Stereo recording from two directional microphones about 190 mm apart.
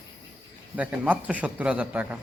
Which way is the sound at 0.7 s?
10° right (ahead or behind).